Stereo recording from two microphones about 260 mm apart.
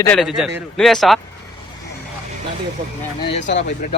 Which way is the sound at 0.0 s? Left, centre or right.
Centre.